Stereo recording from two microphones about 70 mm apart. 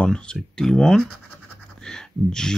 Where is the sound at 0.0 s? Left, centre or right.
Centre.